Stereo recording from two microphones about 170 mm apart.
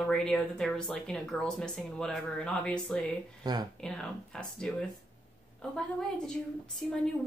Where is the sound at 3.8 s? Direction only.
5° left (ahead or behind).